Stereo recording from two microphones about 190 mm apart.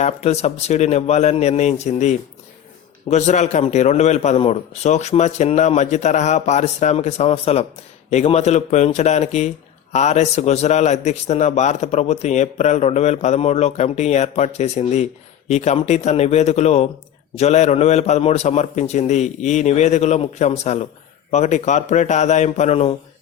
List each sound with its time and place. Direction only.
0.0 s a man's voice: 35° left (ahead or behind)